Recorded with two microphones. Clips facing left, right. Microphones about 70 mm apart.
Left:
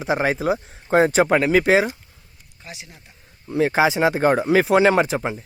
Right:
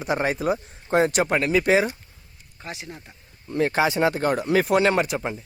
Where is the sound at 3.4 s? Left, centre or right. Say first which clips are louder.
Left 3 dB; centre.